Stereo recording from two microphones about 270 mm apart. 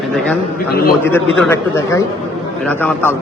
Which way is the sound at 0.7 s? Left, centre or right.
Left.